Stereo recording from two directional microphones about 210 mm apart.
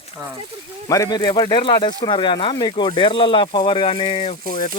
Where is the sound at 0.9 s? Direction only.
15° left (ahead or behind).